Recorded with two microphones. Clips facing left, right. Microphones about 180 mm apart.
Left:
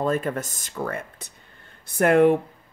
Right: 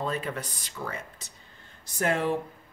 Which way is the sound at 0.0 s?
45° left (ahead or behind).